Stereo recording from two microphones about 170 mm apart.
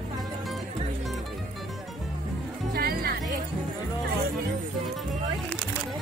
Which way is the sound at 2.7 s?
65° right (ahead or behind).